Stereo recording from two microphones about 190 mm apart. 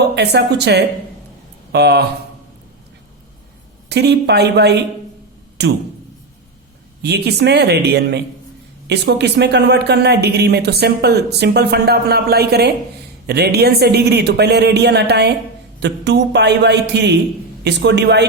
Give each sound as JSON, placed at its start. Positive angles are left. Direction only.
{"t": 0.2, "sound": "speech", "side_deg": -60}
{"t": 3.8, "sound": "speech", "side_deg": -60}
{"t": 7.0, "sound": "speech", "side_deg": -60}